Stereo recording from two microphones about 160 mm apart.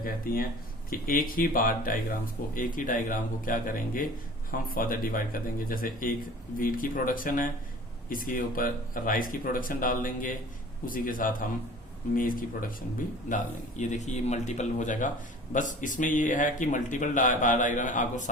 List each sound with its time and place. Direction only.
0.9 s speech: 60° left (ahead or behind)